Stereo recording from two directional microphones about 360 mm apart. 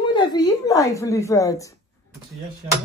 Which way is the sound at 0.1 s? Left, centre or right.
Centre.